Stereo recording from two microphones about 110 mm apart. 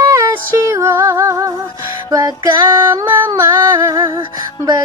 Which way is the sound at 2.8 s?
20° right (ahead or behind).